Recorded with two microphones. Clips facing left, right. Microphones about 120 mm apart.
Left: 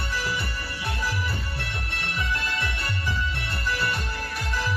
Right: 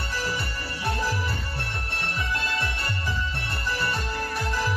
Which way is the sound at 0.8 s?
40° right (ahead or behind).